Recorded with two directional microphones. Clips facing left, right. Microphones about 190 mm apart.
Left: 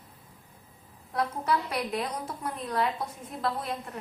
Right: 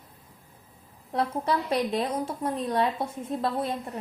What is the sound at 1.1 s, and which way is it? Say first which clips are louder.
A woman's voice: right 2 dB; 30° right (ahead or behind).